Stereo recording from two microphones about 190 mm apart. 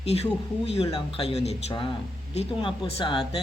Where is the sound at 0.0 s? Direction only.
30° left (ahead or behind).